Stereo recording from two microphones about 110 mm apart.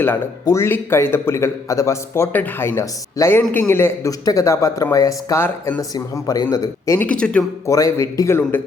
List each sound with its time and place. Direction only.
0.4 s a man's voice: 25° left (ahead or behind)
7.0 s speech: 10° left (ahead or behind)
7.7 s a man's voice: 30° left (ahead or behind)